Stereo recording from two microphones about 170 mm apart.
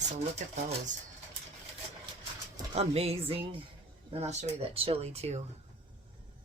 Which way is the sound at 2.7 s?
35° right (ahead or behind).